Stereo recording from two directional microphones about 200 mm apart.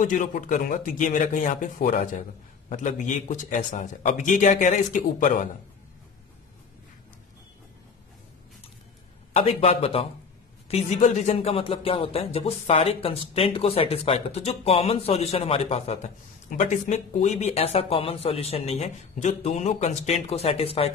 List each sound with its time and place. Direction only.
0.0 s speech: 40° left (ahead or behind)
9.3 s speech: 30° left (ahead or behind)